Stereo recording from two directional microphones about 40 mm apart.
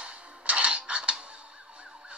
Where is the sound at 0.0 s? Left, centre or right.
Right.